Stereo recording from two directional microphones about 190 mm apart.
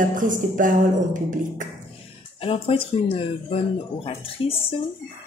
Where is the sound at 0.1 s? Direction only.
45° right (ahead or behind).